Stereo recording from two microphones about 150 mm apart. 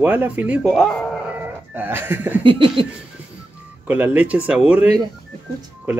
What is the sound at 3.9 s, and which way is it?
Speech, 10° right (ahead or behind).